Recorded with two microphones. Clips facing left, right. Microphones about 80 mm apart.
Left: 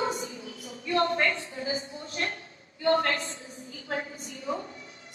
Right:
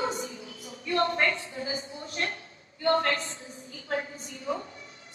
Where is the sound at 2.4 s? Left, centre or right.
Left.